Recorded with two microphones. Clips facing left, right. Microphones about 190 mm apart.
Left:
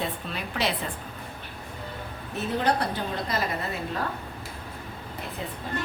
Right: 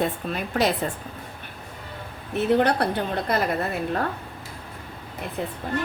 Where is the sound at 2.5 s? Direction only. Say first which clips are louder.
Even; 60° right (ahead or behind).